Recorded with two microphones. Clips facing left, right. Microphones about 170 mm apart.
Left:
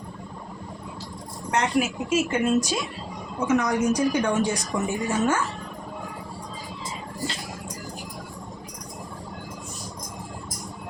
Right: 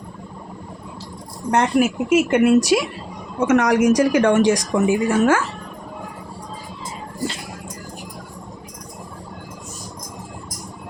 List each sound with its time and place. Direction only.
1.5 s a woman's voice: 55° right (ahead or behind); by 2.8 s 75° right (ahead or behind)
3.4 s a woman's voice: 90° right